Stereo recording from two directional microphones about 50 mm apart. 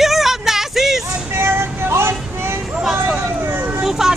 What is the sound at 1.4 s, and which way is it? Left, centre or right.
Vehicle, right.